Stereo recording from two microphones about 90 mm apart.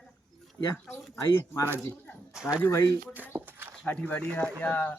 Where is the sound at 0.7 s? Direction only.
25° left (ahead or behind).